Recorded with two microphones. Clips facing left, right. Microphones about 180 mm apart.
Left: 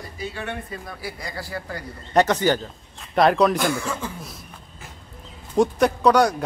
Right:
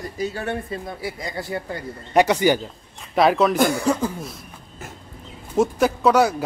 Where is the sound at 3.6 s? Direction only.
40° right (ahead or behind).